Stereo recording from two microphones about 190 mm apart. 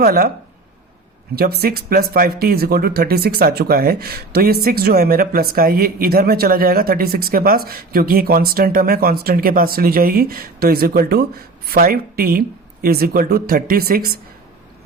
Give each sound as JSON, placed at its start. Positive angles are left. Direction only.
{"t": 0.0, "sound": "speech", "side_deg": -50}
{"t": 1.4, "sound": "speech", "side_deg": -55}